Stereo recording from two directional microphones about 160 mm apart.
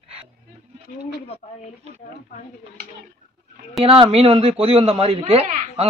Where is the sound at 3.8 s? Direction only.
35° right (ahead or behind).